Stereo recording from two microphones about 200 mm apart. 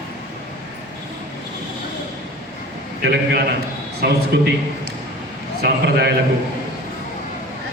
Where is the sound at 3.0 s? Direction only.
55° right (ahead or behind).